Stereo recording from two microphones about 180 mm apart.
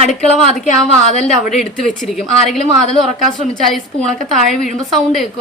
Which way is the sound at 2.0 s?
Centre (ahead or behind).